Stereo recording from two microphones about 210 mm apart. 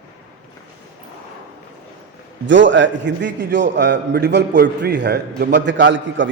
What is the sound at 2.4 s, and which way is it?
A man's voice, 60° right (ahead or behind).